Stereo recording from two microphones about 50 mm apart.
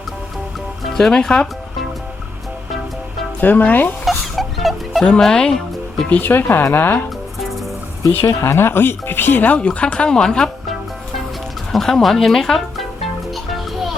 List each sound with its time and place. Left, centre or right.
0.9 s speech: centre
3.4 s speech: left
4.0 s a sound: centre
5.2 s speech: centre
6.2 s speech: left
8.2 s speech: left
8.5 s speech: left
9.6 s speech: left
11.7 s speech: centre
13.3 s music: centre